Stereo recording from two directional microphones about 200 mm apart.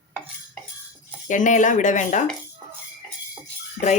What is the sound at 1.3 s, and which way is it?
Speech, 40° left (ahead or behind).